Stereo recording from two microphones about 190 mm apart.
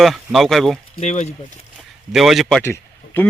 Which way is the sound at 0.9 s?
35° left (ahead or behind).